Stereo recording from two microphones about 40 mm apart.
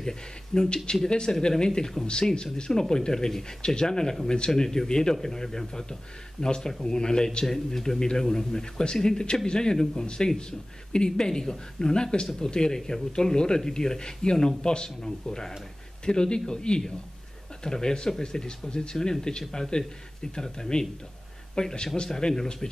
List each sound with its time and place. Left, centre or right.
0.5 s a man's voice: centre